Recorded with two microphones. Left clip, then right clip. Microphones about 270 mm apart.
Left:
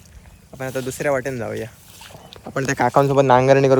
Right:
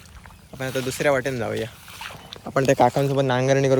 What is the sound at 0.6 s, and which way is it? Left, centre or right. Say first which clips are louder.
Speech: right 1 dB; centre.